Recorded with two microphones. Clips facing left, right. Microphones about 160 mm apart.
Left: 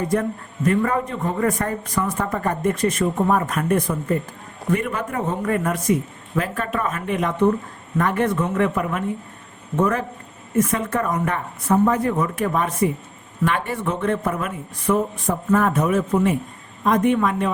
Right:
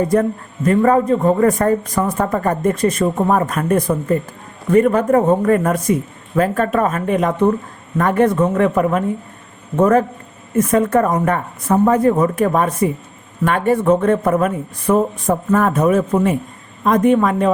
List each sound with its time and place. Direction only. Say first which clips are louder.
0.1 s a man's voice: right 6 dB; 35° right (ahead or behind)